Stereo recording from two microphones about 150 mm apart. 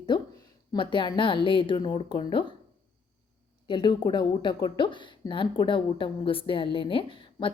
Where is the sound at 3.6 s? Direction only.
30° left (ahead or behind).